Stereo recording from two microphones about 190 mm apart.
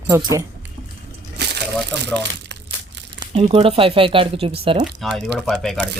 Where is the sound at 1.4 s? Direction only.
60° right (ahead or behind).